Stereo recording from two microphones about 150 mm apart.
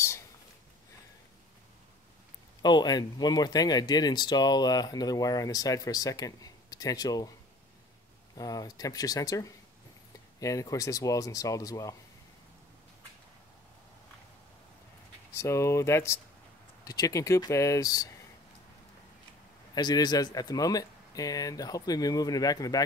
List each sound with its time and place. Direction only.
2.6 s speech: 30° left (ahead or behind)
8.4 s speech: 25° left (ahead or behind)
15.3 s speech: 20° left (ahead or behind)
19.7 s speech: 30° left (ahead or behind)